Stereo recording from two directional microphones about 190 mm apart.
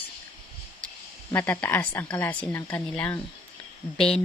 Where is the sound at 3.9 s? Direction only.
30° left (ahead or behind).